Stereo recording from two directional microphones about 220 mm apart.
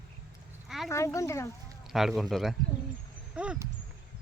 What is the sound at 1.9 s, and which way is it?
Speech, centre (ahead or behind).